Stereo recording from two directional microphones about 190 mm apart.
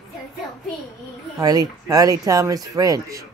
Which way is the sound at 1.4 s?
20° right (ahead or behind).